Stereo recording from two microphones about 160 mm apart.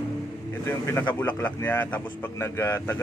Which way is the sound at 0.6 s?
15° left (ahead or behind).